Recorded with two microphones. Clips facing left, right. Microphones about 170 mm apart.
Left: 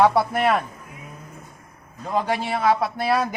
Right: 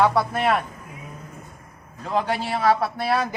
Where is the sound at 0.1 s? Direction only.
15° left (ahead or behind).